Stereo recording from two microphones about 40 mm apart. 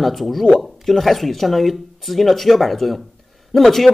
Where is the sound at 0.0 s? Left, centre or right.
Centre.